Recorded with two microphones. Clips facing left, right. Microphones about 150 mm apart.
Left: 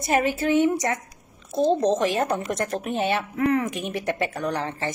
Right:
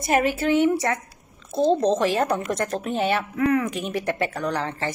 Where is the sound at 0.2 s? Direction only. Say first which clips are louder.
Left 1 dB; 25° left (ahead or behind).